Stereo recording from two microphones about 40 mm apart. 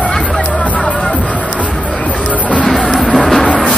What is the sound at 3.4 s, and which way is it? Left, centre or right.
Music, left.